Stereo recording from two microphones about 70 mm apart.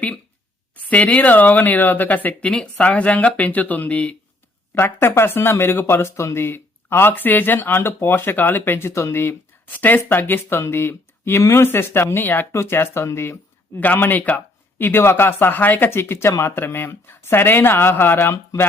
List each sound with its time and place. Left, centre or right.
0.8 s speech: left
4.7 s speech: left
8.9 s speech: left
9.2 s speech: left
12.1 s speech: left
13.7 s speech: left